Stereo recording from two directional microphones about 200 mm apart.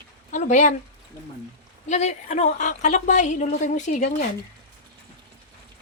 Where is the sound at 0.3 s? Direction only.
35° left (ahead or behind).